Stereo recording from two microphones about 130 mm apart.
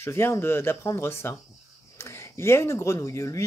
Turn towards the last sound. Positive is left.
turn(degrees=20)  # may be behind; listen again after turning